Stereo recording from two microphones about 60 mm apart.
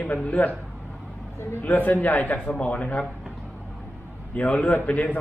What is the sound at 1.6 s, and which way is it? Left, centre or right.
A man's voice, left.